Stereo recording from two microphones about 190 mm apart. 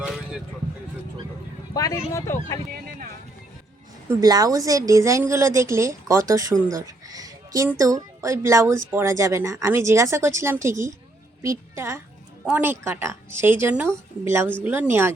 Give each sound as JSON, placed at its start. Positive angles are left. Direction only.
{"t": 0.0, "sound": "vehicle", "side_deg": -5}
{"t": 1.7, "sound": "speech", "side_deg": 15}
{"t": 4.1, "sound": "a woman's voice", "side_deg": -20}
{"t": 6.7, "sound": "a sound", "side_deg": -20}
{"t": 7.8, "sound": "a woman's voice", "side_deg": -20}